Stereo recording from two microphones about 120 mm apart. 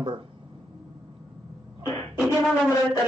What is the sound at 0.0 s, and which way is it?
Speech, 40° right (ahead or behind).